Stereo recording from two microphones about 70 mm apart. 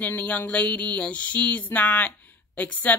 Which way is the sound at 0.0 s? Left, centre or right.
Left.